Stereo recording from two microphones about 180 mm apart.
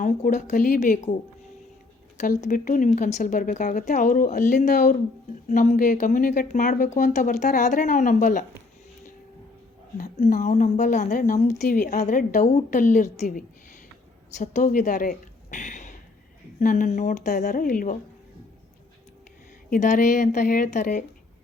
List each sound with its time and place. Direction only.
0.0 s a woman's voice: 45° left (ahead or behind)
2.1 s a woman's voice: 40° left (ahead or behind)
10.2 s a woman's voice: 45° left (ahead or behind)
19.7 s a woman's voice: 45° left (ahead or behind)